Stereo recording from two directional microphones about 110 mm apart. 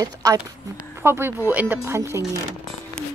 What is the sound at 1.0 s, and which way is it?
Speech, 20° right (ahead or behind).